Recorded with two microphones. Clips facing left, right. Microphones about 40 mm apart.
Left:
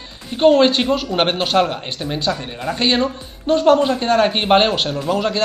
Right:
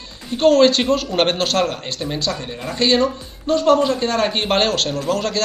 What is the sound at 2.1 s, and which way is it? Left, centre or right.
A man's voice, left.